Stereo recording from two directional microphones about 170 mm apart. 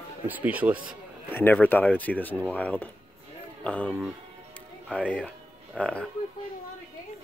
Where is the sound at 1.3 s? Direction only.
10° left (ahead or behind).